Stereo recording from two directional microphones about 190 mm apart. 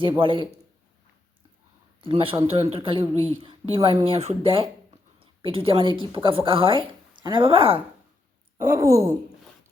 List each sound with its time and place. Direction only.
0.2 s speech: 30° right (ahead or behind)
2.0 s a woman's voice: 30° right (ahead or behind)
8.7 s a sound: 15° right (ahead or behind)